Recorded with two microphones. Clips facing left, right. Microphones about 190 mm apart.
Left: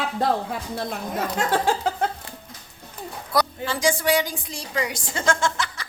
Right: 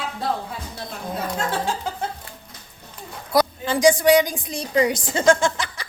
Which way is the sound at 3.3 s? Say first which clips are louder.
Right 4 dB; 15° right (ahead or behind).